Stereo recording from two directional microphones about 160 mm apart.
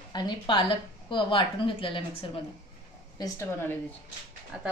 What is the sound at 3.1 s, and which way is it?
Speech, 20° left (ahead or behind).